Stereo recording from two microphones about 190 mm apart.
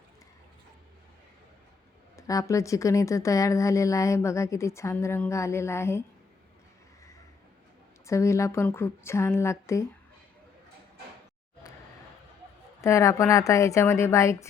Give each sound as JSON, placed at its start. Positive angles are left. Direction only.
{"t": 2.1, "sound": "speech", "side_deg": 15}
{"t": 8.0, "sound": "speech", "side_deg": 15}
{"t": 12.8, "sound": "speech", "side_deg": 15}